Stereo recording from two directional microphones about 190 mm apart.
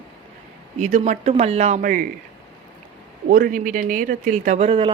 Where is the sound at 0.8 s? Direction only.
40° right (ahead or behind).